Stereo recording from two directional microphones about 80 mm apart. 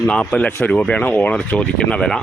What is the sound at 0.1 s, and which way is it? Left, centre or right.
Speech, centre.